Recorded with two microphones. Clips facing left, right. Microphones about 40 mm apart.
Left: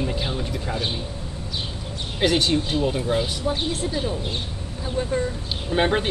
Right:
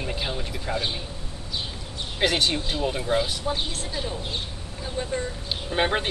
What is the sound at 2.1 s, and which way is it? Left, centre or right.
Speech, centre.